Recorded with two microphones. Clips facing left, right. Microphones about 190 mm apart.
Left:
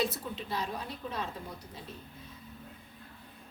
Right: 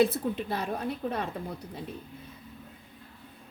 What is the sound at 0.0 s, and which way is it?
A woman's voice, 55° right (ahead or behind).